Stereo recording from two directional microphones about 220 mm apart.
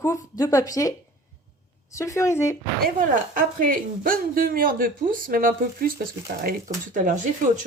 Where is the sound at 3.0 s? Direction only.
35° right (ahead or behind).